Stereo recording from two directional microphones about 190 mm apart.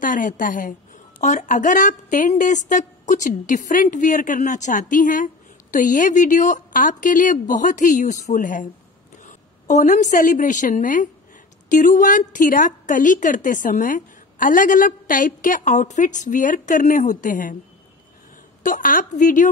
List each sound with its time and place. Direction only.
0.0 s a woman's voice: 45° left (ahead or behind)
18.6 s speech: 45° left (ahead or behind)